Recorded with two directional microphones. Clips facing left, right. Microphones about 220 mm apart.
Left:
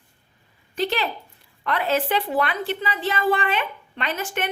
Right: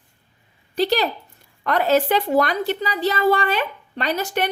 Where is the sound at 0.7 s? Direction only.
35° right (ahead or behind).